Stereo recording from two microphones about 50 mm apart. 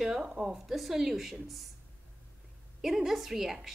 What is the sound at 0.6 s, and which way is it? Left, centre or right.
Speech, centre.